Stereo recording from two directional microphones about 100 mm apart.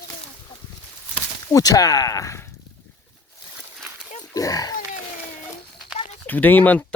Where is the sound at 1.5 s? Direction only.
35° left (ahead or behind).